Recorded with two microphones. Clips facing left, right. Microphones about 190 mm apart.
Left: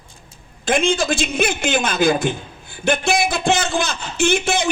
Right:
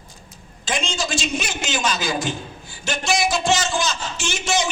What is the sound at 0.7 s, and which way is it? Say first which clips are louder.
A man's voice: left 8 dB; 55° left (ahead or behind).